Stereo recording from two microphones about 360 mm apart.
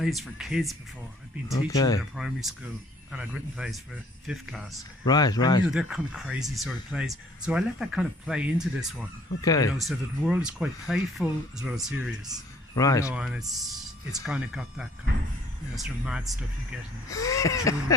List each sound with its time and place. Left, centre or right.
0.0 s speech: centre
1.5 s speech: centre
2.1 s speech: centre
5.0 s speech: centre
5.6 s speech: centre
9.4 s speech: centre
9.8 s speech: centre
12.7 s speech: centre
13.1 s speech: centre